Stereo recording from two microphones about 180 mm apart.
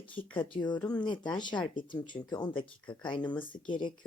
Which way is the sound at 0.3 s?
25° left (ahead or behind).